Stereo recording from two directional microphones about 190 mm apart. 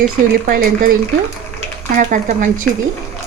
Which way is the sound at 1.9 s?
45° right (ahead or behind).